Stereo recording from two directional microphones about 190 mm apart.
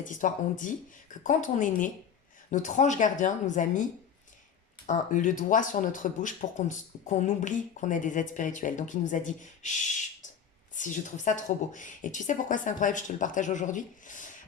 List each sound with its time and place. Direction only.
0.0 s speech: 45° left (ahead or behind)
4.9 s speech: 40° left (ahead or behind)